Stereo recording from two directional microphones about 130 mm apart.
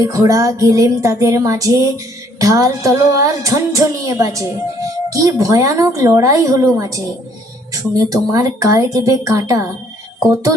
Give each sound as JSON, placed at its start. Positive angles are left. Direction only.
{"t": 0.0, "sound": "a woman's voice", "side_deg": -25}